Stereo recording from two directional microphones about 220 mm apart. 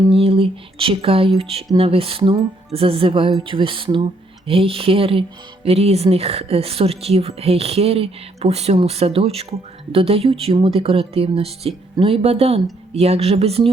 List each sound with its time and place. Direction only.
0.1 s a woman's voice: 25° right (ahead or behind)